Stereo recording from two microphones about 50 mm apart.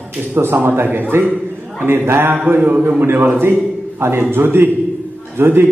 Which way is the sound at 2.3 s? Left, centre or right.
Right.